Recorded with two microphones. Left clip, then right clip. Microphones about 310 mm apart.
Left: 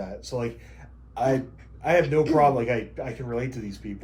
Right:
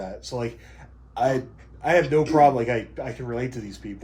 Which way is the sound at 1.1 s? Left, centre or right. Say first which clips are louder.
Right 1 dB; right.